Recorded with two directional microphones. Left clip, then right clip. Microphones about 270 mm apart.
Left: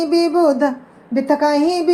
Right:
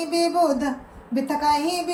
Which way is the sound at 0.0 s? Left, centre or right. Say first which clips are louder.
Left 6 dB; centre.